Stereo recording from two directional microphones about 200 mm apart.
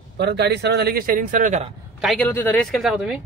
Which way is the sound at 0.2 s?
55° right (ahead or behind).